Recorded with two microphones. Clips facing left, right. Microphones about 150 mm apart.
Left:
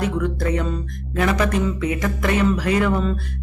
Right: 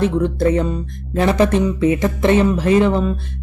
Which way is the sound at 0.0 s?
30° right (ahead or behind).